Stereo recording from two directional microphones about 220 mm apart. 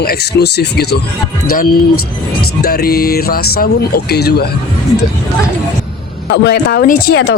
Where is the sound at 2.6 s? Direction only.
45° left (ahead or behind).